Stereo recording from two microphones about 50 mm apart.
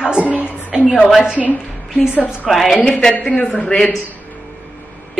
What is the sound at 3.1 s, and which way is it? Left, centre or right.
Speech, left.